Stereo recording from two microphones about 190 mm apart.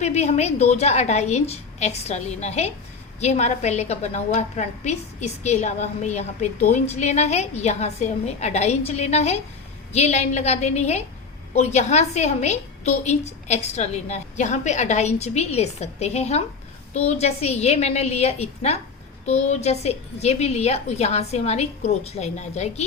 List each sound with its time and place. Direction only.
0.0 s a woman's voice: 35° left (ahead or behind)